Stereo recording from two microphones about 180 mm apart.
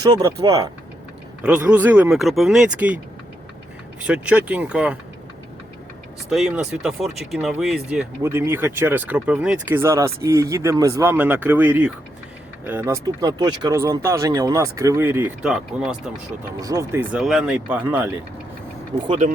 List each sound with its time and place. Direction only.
0.0 s speech: 20° right (ahead or behind)
1.4 s speech: 5° right (ahead or behind)
4.0 s speech: 5° right (ahead or behind)
6.3 s speech: centre (ahead or behind)
8.2 s speech: 15° right (ahead or behind)
16.6 s speech: 20° right (ahead or behind)
19.0 s speech: 30° right (ahead or behind)